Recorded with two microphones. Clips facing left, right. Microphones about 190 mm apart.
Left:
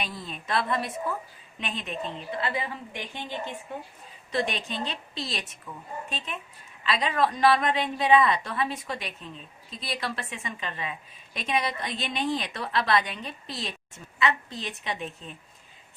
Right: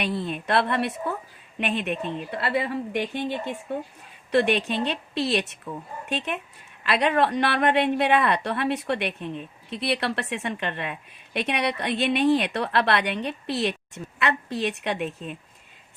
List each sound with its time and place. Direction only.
0.0 s a woman's voice: 65° right (ahead or behind)